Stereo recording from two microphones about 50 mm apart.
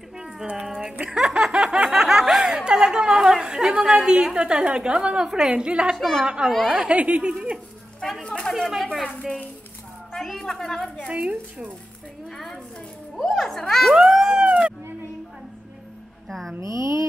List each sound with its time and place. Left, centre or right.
0.7 s snicker: centre
4.0 s a woman's voice: centre
5.9 s a child's voice: centre
6.2 s a woman's voice: centre
8.2 s a sound: left
8.5 s speech: centre
10.1 s a sound: centre
10.4 s a woman's voice: centre
11.1 s speech: right
12.3 s a sound: centre
13.4 s a child's voice: centre
13.9 s a sound: centre
16.3 s speech: centre
16.5 s a woman's voice: right